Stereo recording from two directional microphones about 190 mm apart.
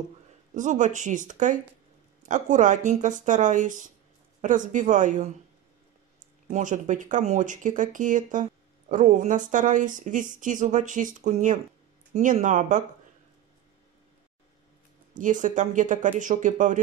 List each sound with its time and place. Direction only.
0.6 s speech: 40° right (ahead or behind)
6.4 s speech: 40° right (ahead or behind)
15.1 s speech: 40° right (ahead or behind)